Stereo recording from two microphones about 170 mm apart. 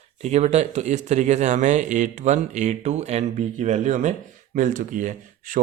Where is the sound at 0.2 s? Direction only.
40° right (ahead or behind).